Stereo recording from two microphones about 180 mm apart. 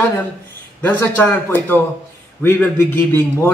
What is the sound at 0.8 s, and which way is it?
A man's voice, 15° left (ahead or behind).